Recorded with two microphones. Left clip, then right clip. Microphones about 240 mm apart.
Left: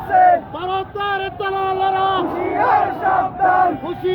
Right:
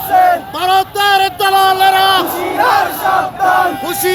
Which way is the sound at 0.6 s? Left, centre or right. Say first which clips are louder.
Right 10 dB; right.